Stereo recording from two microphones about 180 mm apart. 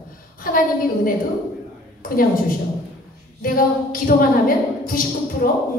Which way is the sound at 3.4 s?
50° left (ahead or behind).